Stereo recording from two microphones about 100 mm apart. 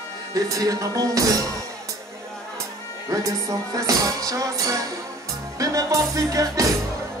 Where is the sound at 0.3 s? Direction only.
35° right (ahead or behind).